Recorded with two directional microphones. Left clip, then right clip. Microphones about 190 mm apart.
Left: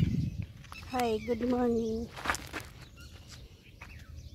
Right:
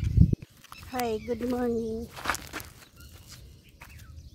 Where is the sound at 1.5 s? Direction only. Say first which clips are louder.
Even; 10° left (ahead or behind).